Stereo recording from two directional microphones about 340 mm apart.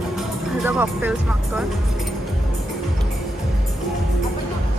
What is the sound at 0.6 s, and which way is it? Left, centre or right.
Speech, centre.